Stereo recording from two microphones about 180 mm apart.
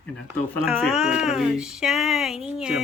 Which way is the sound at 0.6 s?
5° right (ahead or behind).